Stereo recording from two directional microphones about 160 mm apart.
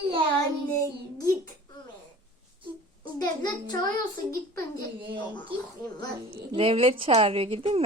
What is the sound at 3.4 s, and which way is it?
Child singing, 25° left (ahead or behind).